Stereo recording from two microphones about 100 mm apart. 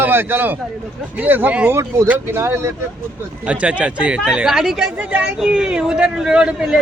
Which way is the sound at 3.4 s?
10° right (ahead or behind).